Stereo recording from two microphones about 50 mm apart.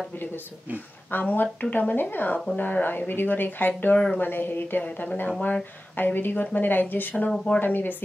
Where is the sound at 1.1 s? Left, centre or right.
Left.